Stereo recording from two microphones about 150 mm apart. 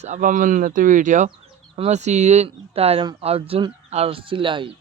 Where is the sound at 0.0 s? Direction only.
55° right (ahead or behind).